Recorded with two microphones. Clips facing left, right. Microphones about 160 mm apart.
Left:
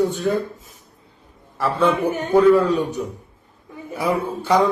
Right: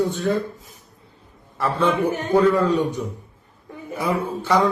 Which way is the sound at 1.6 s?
10° left (ahead or behind).